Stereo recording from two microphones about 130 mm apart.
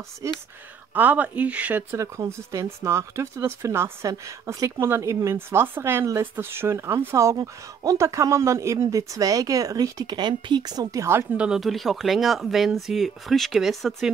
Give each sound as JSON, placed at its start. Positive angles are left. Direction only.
{"t": 0.2, "sound": "speech", "side_deg": -25}
{"t": 0.9, "sound": "speech", "side_deg": -10}